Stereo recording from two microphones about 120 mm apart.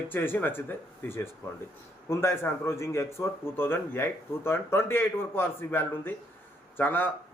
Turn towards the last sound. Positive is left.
turn(degrees=15)  # may be behind; listen again after turning